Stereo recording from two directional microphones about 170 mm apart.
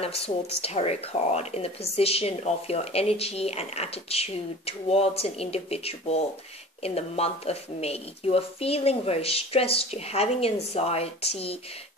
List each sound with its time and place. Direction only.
0.0 s speech: 35° left (ahead or behind)